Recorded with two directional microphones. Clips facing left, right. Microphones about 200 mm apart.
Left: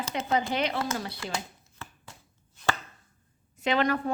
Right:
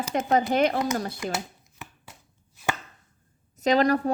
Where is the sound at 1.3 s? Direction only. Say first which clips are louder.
Right 3 dB; 15° right (ahead or behind).